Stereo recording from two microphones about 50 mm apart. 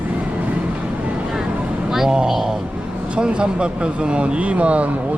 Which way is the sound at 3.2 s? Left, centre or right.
Right.